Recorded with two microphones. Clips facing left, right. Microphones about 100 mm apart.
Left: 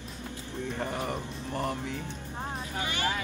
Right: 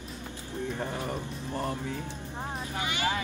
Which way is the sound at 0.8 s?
15° left (ahead or behind).